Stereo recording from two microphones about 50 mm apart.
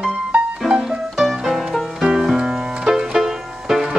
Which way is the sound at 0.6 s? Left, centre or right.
Centre.